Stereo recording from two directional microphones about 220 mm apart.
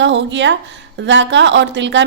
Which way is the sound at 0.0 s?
55° right (ahead or behind).